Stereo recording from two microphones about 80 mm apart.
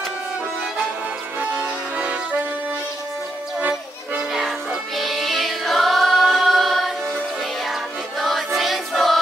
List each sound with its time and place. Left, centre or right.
1.4 s music: centre
3.5 s accordion: right
4.3 s music: centre
8.2 s music: centre
8.5 s choir: centre